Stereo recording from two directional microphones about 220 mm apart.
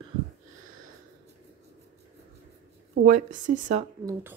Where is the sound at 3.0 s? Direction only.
35° right (ahead or behind).